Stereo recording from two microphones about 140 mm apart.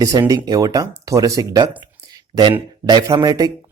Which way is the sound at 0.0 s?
25° right (ahead or behind).